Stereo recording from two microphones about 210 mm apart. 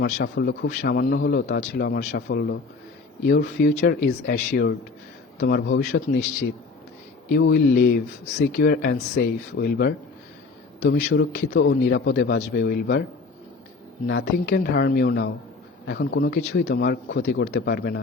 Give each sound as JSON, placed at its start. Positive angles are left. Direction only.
{"t": 0.0, "sound": "speech", "side_deg": 55}
{"t": 5.4, "sound": "a man's voice", "side_deg": 60}
{"t": 7.3, "sound": "a man's voice", "side_deg": 55}
{"t": 14.1, "sound": "a man's voice", "side_deg": 55}